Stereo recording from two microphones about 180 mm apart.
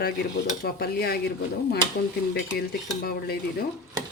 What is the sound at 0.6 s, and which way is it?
Speech, 60° left (ahead or behind).